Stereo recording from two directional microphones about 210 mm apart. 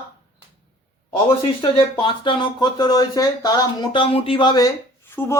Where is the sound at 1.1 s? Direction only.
25° left (ahead or behind).